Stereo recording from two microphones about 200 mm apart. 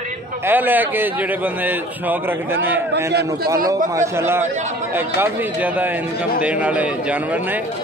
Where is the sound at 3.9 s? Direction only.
10° right (ahead or behind).